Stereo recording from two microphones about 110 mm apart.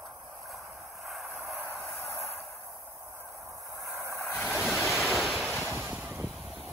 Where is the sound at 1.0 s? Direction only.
Centre (ahead or behind).